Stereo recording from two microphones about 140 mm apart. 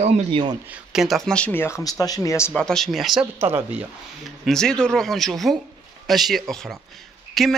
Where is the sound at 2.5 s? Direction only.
5° left (ahead or behind).